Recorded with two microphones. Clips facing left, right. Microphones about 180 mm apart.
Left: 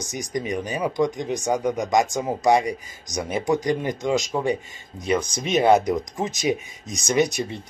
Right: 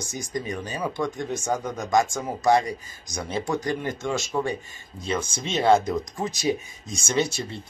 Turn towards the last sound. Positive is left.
turn(degrees=15)  # may be behind; listen again after turning